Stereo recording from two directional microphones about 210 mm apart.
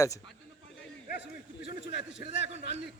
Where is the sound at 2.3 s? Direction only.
30° right (ahead or behind).